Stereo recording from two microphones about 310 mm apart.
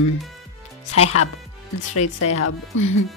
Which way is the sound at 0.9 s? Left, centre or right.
Left.